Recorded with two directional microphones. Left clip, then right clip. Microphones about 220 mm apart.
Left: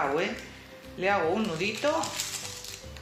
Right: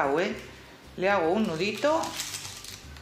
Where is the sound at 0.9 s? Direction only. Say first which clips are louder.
Right 2 dB; 40° right (ahead or behind).